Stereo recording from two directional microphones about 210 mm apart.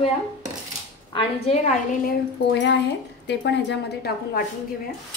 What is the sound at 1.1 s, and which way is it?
Speech, 30° left (ahead or behind).